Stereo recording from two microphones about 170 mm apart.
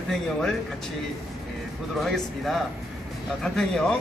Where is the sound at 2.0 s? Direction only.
Centre (ahead or behind).